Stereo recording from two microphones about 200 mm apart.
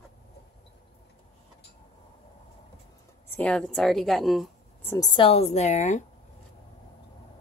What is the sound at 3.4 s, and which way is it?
A woman's voice, 5° left (ahead or behind).